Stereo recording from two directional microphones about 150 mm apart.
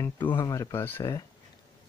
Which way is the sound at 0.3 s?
20° left (ahead or behind).